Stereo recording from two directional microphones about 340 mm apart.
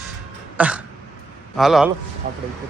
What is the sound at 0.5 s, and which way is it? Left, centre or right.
Throat clearing, centre.